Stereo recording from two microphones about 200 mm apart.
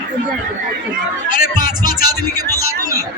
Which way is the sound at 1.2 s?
45° left (ahead or behind).